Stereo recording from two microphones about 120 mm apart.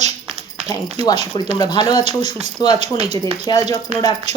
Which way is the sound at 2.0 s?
65° right (ahead or behind).